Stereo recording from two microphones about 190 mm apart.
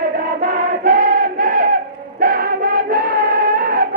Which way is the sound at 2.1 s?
50° right (ahead or behind).